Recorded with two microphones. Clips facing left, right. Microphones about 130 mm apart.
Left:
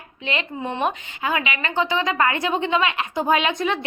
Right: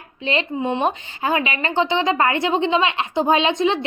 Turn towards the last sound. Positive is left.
turn(degrees=-25)  # may be behind; listen again after turning